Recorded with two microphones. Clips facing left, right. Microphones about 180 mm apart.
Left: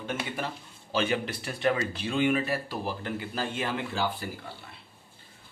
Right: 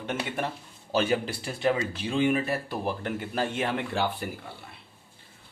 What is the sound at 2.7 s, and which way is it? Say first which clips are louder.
Speech: right 2 dB; 55° right (ahead or behind).